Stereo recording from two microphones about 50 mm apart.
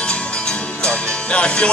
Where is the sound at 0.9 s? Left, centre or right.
Left.